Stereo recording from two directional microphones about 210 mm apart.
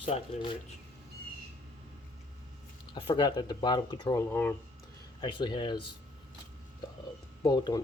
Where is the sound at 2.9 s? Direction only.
20° left (ahead or behind).